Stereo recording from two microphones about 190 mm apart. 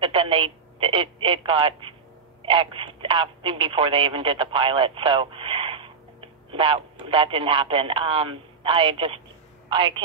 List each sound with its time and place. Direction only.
0.0 s speech: 30° right (ahead or behind)